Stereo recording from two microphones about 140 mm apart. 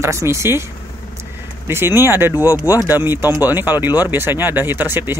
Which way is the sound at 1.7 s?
15° right (ahead or behind).